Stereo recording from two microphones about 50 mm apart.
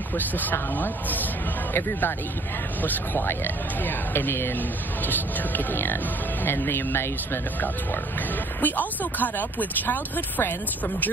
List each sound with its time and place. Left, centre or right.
0.1 s speech: left
8.5 s speech: left